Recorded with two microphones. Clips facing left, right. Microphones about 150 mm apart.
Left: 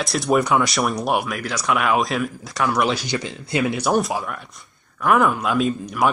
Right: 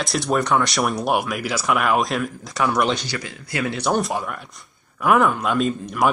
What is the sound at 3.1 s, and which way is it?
Speech, 20° left (ahead or behind).